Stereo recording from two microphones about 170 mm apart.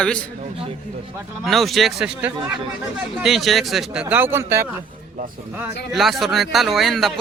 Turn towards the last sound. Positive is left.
turn(degrees=0)  # may be behind; listen again after turning